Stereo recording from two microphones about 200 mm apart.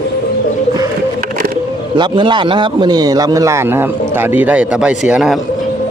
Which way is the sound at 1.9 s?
25° right (ahead or behind).